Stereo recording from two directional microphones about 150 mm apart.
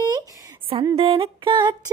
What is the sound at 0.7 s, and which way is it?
Music, 35° right (ahead or behind).